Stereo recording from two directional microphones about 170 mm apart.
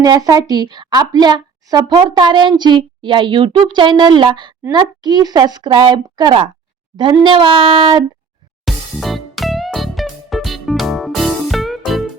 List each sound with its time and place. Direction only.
0.0 s a woman's voice: 20° right (ahead or behind)
8.6 s music: centre (ahead or behind)